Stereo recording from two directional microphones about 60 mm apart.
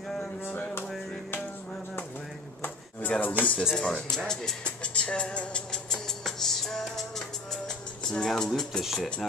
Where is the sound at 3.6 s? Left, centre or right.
Centre.